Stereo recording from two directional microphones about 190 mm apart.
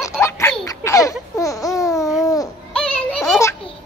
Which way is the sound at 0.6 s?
15° left (ahead or behind).